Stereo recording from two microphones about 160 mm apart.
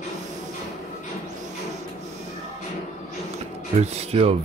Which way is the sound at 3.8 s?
40° right (ahead or behind).